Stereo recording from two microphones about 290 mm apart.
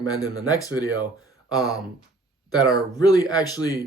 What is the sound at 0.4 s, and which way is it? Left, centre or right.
Speech, centre.